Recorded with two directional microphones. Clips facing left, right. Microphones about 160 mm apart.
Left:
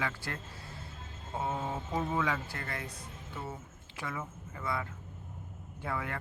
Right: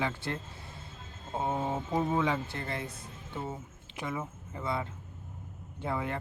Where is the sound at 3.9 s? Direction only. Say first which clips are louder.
Right 3 dB; 20° right (ahead or behind).